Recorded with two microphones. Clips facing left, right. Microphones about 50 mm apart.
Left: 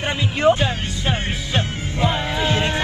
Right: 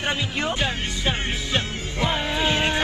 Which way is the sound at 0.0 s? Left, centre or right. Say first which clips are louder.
Left 7 dB; left.